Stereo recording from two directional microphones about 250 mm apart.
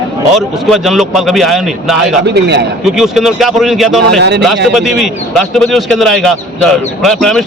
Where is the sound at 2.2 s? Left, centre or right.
Right.